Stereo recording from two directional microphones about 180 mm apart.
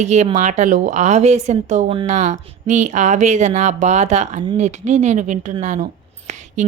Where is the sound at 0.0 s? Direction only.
40° right (ahead or behind).